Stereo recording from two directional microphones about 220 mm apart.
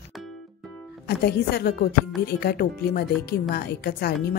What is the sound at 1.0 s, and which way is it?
A woman's voice, 45° left (ahead or behind).